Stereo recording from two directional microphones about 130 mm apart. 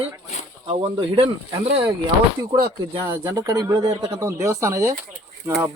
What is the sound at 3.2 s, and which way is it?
Speech, 25° right (ahead or behind).